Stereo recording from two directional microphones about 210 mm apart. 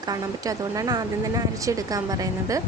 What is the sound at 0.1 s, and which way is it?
Speech, 15° right (ahead or behind).